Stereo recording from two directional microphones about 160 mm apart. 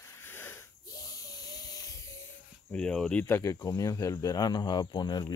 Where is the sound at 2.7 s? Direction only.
5° left (ahead or behind).